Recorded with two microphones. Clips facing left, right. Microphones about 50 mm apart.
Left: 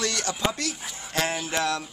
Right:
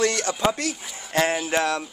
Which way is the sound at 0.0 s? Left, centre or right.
Right.